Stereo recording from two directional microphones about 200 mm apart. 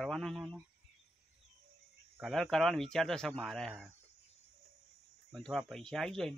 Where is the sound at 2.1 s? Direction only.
Centre (ahead or behind).